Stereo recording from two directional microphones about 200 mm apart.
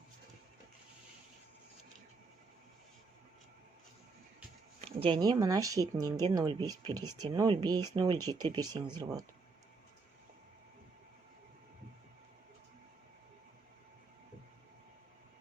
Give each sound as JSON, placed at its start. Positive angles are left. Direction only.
{"t": 4.9, "sound": "speech", "side_deg": -30}